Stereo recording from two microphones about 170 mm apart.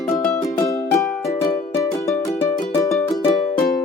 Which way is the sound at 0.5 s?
20° left (ahead or behind).